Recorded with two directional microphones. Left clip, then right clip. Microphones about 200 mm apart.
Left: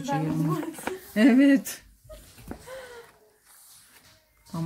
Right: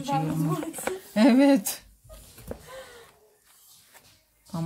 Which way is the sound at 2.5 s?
60° right (ahead or behind).